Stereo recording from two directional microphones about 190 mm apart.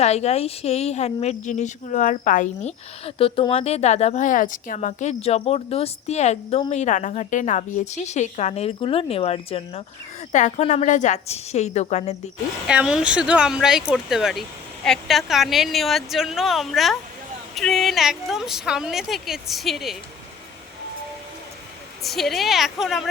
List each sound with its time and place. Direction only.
0.0 s speech: 35° left (ahead or behind)
3.2 s speech: 30° left (ahead or behind)
12.6 s a woman's voice: 5° right (ahead or behind)
22.0 s a woman's voice: centre (ahead or behind)